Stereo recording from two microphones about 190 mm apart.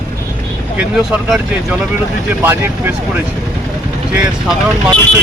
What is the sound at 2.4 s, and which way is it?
Speech, 10° right (ahead or behind).